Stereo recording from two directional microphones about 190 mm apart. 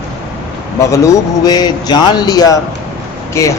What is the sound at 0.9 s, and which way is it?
A man's voice, 15° left (ahead or behind).